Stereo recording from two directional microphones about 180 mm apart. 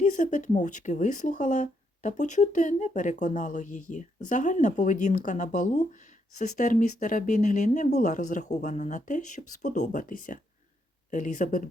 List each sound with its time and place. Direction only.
0.0 s speech: 45° left (ahead or behind)